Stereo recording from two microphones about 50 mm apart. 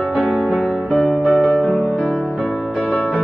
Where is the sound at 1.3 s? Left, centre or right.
Left.